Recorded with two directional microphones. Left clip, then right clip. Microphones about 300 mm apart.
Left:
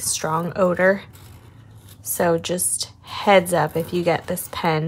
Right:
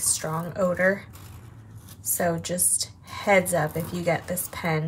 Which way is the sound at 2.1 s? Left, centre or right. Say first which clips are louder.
Left 6 dB; centre.